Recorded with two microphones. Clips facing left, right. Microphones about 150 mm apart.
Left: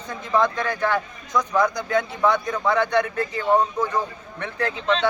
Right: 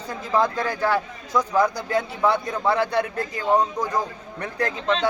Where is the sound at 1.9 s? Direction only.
30° right (ahead or behind).